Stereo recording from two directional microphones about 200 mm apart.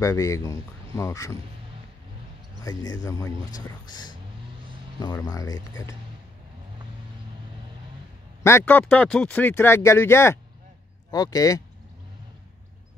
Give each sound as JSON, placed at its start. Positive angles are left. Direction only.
{"t": 0.0, "sound": "speech", "side_deg": 15}
{"t": 2.6, "sound": "speech", "side_deg": 20}
{"t": 8.5, "sound": "speech", "side_deg": 10}